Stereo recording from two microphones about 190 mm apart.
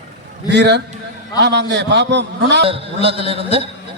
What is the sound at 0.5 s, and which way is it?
A man's voice, 65° right (ahead or behind).